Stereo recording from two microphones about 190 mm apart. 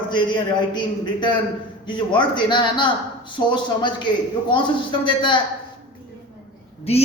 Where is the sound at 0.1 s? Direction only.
25° left (ahead or behind).